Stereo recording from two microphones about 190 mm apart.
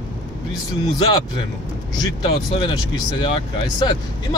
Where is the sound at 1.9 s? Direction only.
20° left (ahead or behind).